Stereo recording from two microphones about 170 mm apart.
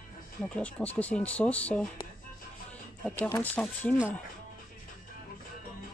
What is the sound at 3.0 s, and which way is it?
Speech, 10° left (ahead or behind).